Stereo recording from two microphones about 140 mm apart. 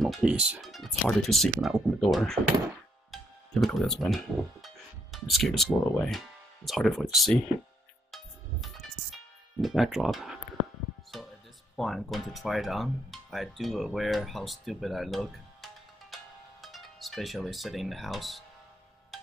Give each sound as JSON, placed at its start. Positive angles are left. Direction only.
{"t": 0.0, "sound": "speech", "side_deg": -5}
{"t": 8.1, "sound": "music", "side_deg": 0}
{"t": 9.6, "sound": "speech", "side_deg": 0}
{"t": 11.1, "sound": "music", "side_deg": 0}
{"t": 11.7, "sound": "speech", "side_deg": 0}